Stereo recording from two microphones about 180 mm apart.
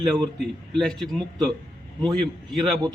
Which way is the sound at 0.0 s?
5° left (ahead or behind).